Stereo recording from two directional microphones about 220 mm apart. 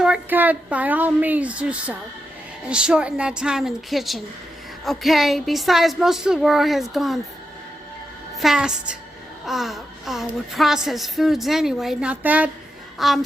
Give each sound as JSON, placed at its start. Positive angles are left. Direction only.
{"t": 0.0, "sound": "a woman's voice", "side_deg": -5}
{"t": 8.4, "sound": "a woman's voice", "side_deg": 0}